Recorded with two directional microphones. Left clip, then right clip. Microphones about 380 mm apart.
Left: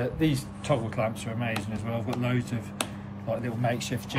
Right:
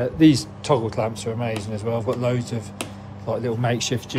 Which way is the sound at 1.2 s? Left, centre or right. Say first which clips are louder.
Right 6 dB; centre.